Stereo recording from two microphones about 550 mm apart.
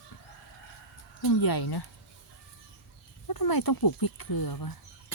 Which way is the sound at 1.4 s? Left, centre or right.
Left.